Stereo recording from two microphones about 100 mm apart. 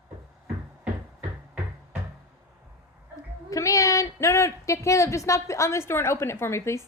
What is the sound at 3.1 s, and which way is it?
Speech, 35° left (ahead or behind).